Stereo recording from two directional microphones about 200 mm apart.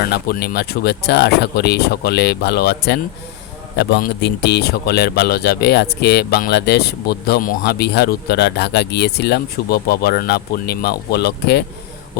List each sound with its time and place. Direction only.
0.0 s speech: 50° left (ahead or behind)